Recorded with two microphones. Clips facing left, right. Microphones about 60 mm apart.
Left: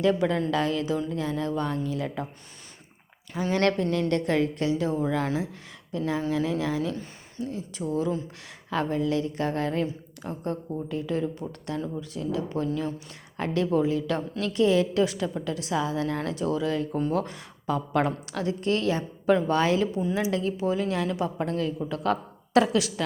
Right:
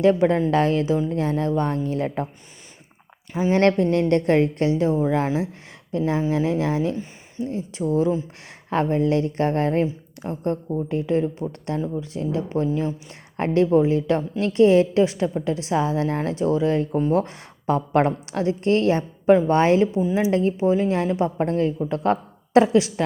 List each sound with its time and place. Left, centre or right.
0.0 s a woman's voice: right
3.5 s a woman's voice: right
6.2 s speech: right
7.4 s a woman's voice: right
10.8 s a woman's voice: right
12.1 s a woman's voice: right
12.6 s speech: centre
13.3 s a woman's voice: right
19.2 s a woman's voice: right